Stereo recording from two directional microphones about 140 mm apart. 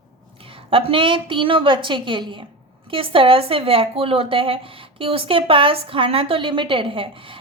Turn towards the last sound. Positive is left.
turn(degrees=-40)  # may be behind; listen again after turning